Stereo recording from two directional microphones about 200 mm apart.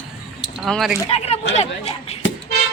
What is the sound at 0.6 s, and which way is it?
Speech, centre (ahead or behind).